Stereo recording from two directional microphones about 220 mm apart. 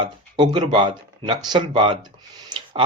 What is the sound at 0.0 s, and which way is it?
Speech, 20° right (ahead or behind).